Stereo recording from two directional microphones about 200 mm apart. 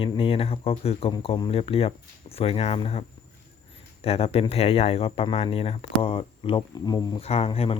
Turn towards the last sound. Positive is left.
turn(degrees=30)  # may be behind; listen again after turning